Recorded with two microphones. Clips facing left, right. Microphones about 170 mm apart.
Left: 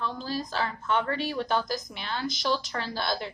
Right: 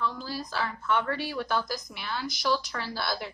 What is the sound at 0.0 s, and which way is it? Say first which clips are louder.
Speech: left 1 dB; 25° left (ahead or behind).